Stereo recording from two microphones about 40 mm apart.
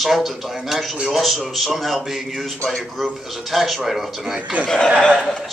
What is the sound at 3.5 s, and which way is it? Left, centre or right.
Speech, centre.